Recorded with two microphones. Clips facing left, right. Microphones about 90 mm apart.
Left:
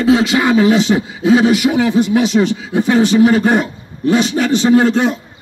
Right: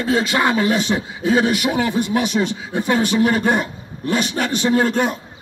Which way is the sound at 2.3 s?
65° left (ahead or behind).